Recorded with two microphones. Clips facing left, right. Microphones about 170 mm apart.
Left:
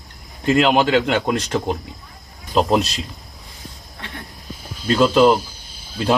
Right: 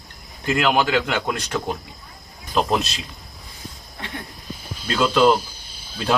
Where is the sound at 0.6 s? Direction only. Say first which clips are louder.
Left 1 dB; 25° left (ahead or behind).